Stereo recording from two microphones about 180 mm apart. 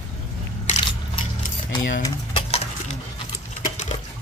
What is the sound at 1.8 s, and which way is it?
Speech, 50° left (ahead or behind).